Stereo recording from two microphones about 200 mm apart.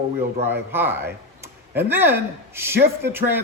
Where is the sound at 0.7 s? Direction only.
10° right (ahead or behind).